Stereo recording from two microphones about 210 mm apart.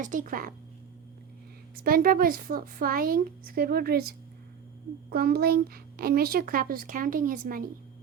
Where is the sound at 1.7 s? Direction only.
45° right (ahead or behind).